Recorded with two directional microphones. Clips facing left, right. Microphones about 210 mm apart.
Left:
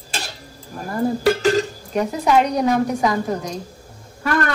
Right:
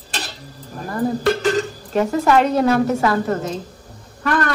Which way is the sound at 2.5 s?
15° left (ahead or behind).